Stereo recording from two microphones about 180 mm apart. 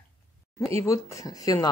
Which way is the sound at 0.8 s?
15° left (ahead or behind).